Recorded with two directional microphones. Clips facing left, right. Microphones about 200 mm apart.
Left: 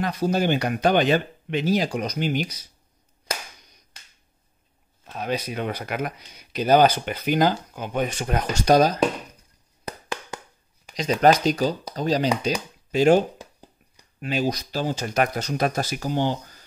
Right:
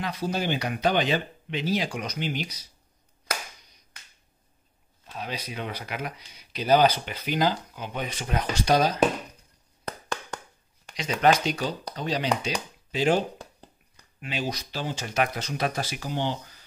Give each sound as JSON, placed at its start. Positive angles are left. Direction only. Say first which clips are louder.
{"t": 0.0, "sound": "speech", "louder": "left 6 dB", "side_deg": 45}
{"t": 5.1, "sound": "speech", "louder": "left 7 dB", "side_deg": 50}
{"t": 11.0, "sound": "speech", "louder": "left 4 dB", "side_deg": 40}
{"t": 14.2, "sound": "speech", "louder": "left 7 dB", "side_deg": 40}